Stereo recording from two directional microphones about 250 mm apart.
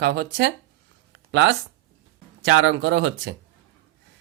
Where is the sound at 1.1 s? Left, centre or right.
Right.